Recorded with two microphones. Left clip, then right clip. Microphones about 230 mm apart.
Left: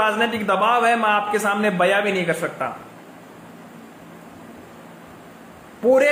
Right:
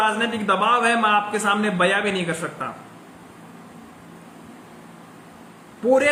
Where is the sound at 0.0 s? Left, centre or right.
Centre.